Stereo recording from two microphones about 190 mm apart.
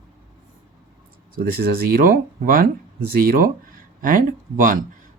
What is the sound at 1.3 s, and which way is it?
Speech, 50° right (ahead or behind).